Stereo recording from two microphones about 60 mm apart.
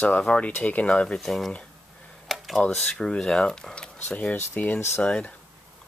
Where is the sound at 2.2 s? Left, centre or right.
Centre.